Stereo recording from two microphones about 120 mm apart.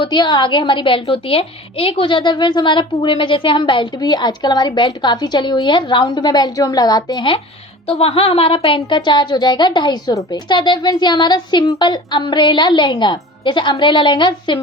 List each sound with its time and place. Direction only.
0.0 s a woman's voice: 40° left (ahead or behind)
7.9 s a woman's voice: 55° left (ahead or behind)